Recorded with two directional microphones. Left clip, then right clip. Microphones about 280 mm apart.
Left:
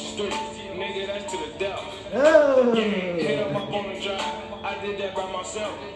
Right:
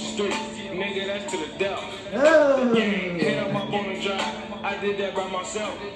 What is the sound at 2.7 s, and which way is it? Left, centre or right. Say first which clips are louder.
Speech: even; right.